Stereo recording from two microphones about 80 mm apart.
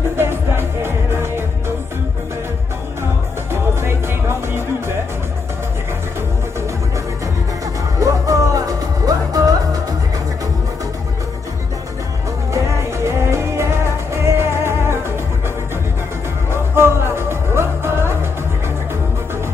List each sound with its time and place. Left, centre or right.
0.2 s music: right
3.5 s music: right
8.0 s music: right
12.5 s music: right
16.5 s music: right